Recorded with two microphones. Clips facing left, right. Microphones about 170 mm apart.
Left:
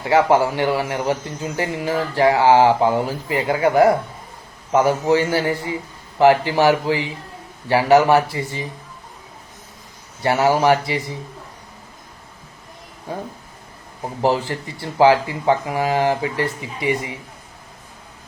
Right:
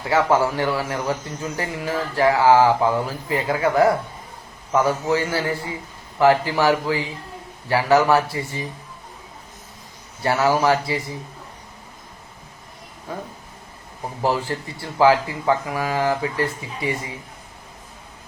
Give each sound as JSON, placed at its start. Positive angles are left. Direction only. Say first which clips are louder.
{"t": 0.1, "sound": "speech", "louder": "left 3 dB", "side_deg": 20}
{"t": 10.2, "sound": "speech", "louder": "left 2 dB", "side_deg": 20}
{"t": 14.2, "sound": "speech", "louder": "left 3 dB", "side_deg": 25}